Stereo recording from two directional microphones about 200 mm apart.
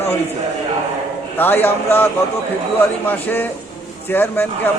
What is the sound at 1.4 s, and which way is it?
A man's voice, 10° left (ahead or behind).